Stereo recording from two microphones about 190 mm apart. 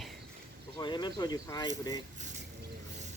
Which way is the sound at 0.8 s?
20° left (ahead or behind).